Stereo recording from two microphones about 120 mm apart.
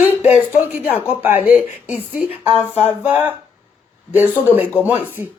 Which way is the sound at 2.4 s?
55° left (ahead or behind).